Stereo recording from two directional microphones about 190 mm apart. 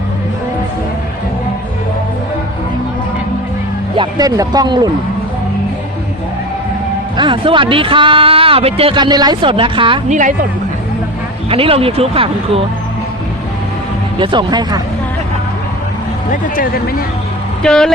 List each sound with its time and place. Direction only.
3.9 s speech: 20° right (ahead or behind)
7.2 s speech: 25° right (ahead or behind)
10.1 s speech: 40° right (ahead or behind)
11.4 s speech: 30° right (ahead or behind)
14.2 s speech: 25° right (ahead or behind)
16.3 s speech: 45° left (ahead or behind)
17.6 s speech: 5° left (ahead or behind)